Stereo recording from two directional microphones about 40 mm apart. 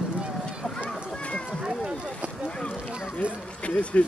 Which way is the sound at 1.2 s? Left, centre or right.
Left.